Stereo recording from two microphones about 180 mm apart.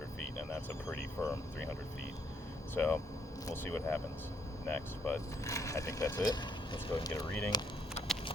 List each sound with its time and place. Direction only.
1.2 s speech: 15° left (ahead or behind)
2.7 s speech: 10° left (ahead or behind)